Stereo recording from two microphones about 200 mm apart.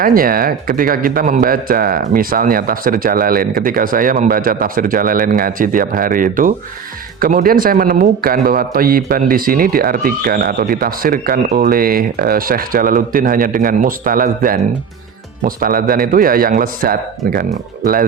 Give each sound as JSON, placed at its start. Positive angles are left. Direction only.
{"t": 0.0, "sound": "a man's voice", "side_deg": -45}